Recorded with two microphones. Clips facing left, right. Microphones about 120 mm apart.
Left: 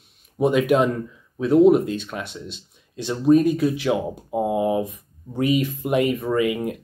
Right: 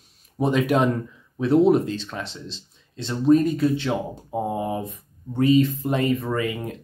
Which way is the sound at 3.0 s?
15° left (ahead or behind).